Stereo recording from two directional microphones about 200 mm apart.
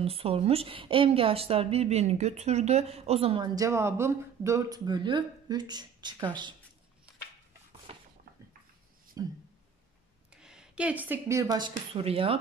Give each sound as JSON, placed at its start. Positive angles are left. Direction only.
{"t": 0.0, "sound": "a woman's voice", "side_deg": -30}
{"t": 3.5, "sound": "a woman's voice", "side_deg": -15}
{"t": 7.9, "sound": "a sound", "side_deg": -30}
{"t": 9.2, "sound": "speech", "side_deg": -20}
{"t": 10.3, "sound": "speech", "side_deg": -5}